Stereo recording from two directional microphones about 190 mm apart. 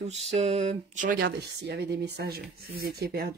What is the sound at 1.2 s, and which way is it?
Speech, 60° right (ahead or behind).